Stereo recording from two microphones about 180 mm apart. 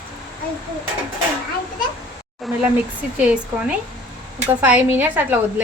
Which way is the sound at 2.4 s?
Centre (ahead or behind).